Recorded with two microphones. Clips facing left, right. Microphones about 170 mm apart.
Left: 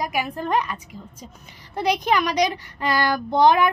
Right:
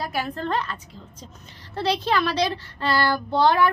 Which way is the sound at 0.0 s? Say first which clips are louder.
Left 2 dB; 15° left (ahead or behind).